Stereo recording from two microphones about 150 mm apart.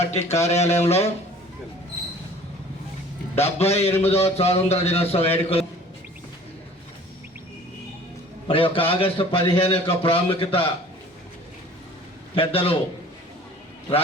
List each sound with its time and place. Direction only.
0.0 s a man's voice: 45° left (ahead or behind)
3.3 s a man's voice: 45° left (ahead or behind)
8.4 s a man's voice: 35° left (ahead or behind)
12.3 s a man's voice: 40° left (ahead or behind)